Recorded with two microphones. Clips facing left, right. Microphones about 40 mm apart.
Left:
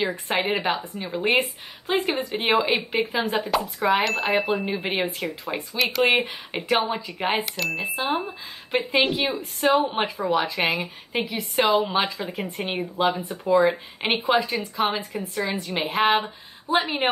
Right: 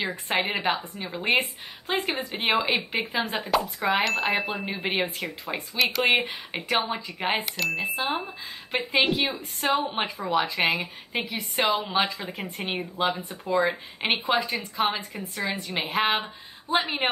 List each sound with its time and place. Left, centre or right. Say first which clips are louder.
0.0 s speech: left 2 dB; centre